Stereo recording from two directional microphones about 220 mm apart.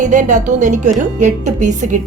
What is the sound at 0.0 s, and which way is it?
A woman's voice, 35° right (ahead or behind).